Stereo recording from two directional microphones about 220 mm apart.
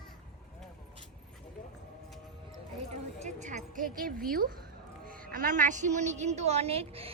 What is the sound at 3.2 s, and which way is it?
A woman's voice, 35° right (ahead or behind).